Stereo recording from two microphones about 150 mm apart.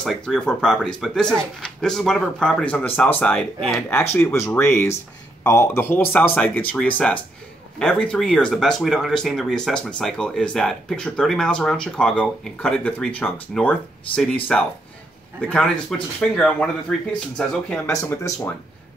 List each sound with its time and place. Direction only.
0.0 s speech: centre (ahead or behind)
17.8 s speech: 20° left (ahead or behind)